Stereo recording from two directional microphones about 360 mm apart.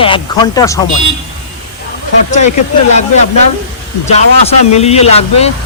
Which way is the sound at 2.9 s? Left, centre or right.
Centre.